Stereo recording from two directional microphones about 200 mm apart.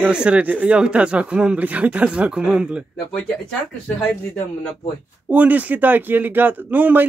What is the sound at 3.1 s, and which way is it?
Speech, 5° left (ahead or behind).